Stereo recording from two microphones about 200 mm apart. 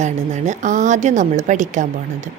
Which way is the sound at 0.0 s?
35° right (ahead or behind).